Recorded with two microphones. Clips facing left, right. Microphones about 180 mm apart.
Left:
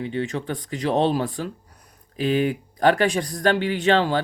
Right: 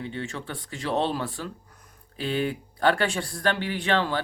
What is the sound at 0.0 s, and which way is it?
Speech, 20° left (ahead or behind).